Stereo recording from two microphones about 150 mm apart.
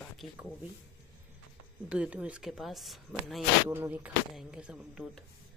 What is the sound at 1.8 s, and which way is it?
Speech, 10° right (ahead or behind).